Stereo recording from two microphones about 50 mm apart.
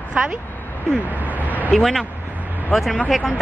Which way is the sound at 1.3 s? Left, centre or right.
Right.